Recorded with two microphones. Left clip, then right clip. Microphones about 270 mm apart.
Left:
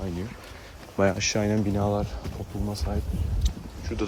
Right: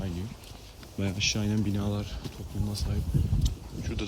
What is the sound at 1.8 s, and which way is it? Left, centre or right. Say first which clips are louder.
Speech: left 9 dB; centre.